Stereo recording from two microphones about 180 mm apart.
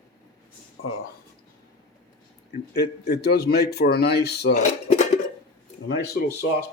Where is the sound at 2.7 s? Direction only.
65° left (ahead or behind).